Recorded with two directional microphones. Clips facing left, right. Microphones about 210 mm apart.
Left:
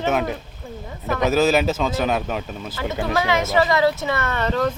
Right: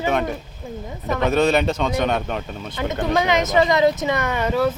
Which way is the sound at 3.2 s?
20° right (ahead or behind).